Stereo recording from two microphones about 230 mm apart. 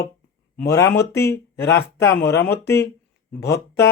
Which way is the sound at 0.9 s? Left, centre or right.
Left.